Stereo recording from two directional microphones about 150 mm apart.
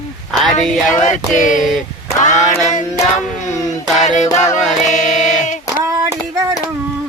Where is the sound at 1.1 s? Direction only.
55° left (ahead or behind).